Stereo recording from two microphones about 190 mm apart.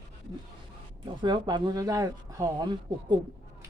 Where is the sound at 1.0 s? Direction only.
25° right (ahead or behind).